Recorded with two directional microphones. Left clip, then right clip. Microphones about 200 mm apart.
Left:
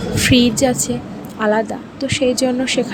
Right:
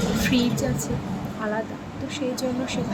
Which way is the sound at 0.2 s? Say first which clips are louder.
Left 13 dB; 40° left (ahead or behind).